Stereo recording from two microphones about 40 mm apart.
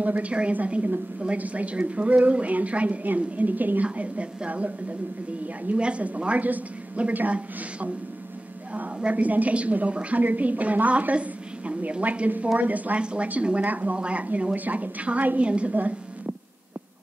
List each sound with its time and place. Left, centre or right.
0.0 s a woman's voice: right
3.8 s a woman's voice: right
5.8 s a woman's voice: right
9.1 s a woman's voice: right
10.2 s a woman's voice: right
13.0 s a woman's voice: right
13.9 s speech: right
14.5 s a woman's voice: right
15.7 s a sound: right